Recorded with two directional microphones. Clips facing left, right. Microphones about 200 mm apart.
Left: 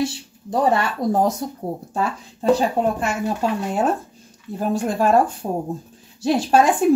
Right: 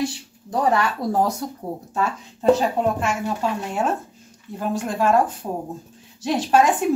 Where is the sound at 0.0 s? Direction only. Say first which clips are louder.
Left 2 dB; 25° left (ahead or behind).